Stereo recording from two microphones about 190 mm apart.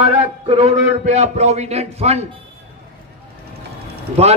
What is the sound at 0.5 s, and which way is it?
A man's voice, 35° right (ahead or behind).